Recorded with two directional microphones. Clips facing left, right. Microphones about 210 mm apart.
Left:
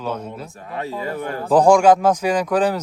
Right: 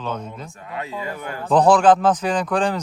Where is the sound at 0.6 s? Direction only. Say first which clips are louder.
Left 3 dB; 35° left (ahead or behind).